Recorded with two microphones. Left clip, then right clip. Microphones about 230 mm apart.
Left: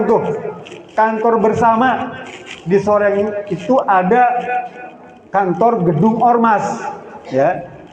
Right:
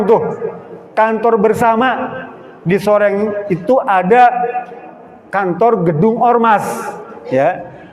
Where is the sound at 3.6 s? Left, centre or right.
Right.